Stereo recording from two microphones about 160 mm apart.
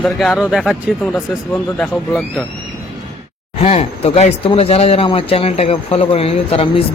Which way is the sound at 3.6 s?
40° left (ahead or behind).